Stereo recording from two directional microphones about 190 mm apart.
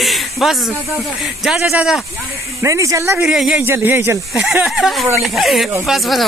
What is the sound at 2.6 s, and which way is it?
Speech, 15° right (ahead or behind).